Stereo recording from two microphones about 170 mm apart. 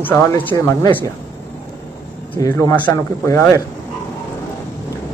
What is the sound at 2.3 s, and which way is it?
Speech, 15° left (ahead or behind).